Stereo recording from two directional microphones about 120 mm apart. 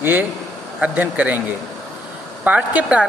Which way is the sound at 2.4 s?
10° right (ahead or behind).